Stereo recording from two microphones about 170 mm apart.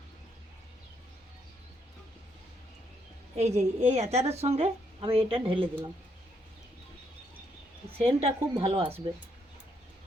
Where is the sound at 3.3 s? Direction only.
40° right (ahead or behind).